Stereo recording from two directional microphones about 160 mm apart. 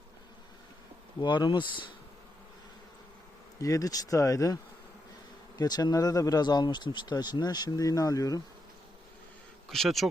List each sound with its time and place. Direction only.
1.2 s speech: 30° left (ahead or behind)
3.6 s speech: 20° left (ahead or behind)
5.5 s speech: 25° left (ahead or behind)
9.6 s speech: centre (ahead or behind)